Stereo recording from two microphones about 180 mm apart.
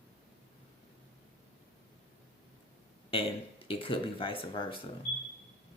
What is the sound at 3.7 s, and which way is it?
Speech, 30° left (ahead or behind).